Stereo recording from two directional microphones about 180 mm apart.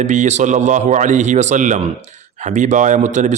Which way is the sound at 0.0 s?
40° right (ahead or behind).